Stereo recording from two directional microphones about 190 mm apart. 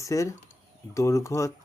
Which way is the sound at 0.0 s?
15° left (ahead or behind).